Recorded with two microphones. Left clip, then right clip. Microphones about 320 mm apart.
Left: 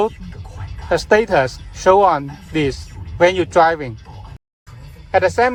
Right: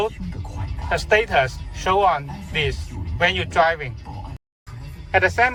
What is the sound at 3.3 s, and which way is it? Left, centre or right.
Speech, centre.